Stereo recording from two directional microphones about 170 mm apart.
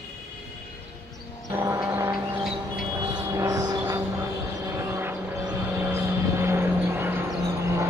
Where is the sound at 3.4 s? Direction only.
20° right (ahead or behind).